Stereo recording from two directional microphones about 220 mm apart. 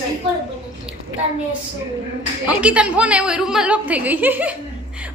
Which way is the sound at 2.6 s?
5° right (ahead or behind).